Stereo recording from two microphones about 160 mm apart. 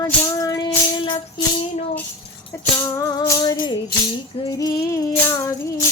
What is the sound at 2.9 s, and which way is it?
Music, 20° left (ahead or behind).